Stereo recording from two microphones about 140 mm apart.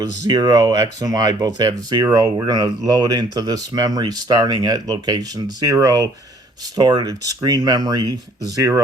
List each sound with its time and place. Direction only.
0.3 s speech: 30° right (ahead or behind)